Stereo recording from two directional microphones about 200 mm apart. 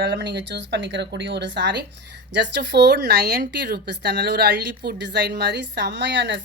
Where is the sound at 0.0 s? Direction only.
60° right (ahead or behind).